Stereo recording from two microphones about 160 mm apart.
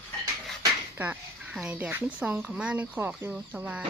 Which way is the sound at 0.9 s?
10° right (ahead or behind).